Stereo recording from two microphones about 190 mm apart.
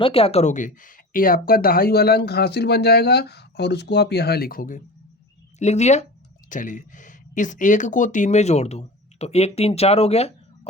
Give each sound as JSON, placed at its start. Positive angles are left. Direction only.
{"t": 0.0, "sound": "speech", "side_deg": 30}
{"t": 5.5, "sound": "speech", "side_deg": 35}